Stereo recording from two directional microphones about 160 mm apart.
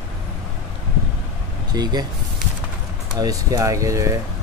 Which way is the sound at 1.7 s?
25° right (ahead or behind).